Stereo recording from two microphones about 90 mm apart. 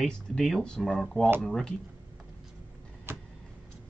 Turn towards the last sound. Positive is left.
turn(degrees=-25)  # may be behind; listen again after turning